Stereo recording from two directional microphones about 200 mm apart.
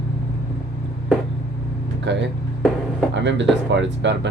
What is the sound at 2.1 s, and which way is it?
Speech, 60° right (ahead or behind).